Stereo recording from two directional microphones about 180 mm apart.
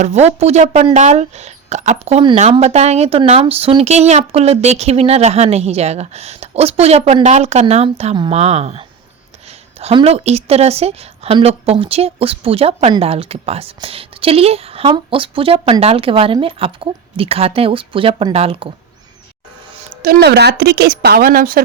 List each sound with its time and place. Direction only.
0.0 s a woman's voice: 40° right (ahead or behind)
9.8 s a woman's voice: 35° right (ahead or behind)
19.9 s speech: 55° right (ahead or behind)